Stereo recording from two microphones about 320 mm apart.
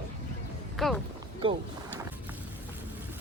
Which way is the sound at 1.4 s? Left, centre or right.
Centre.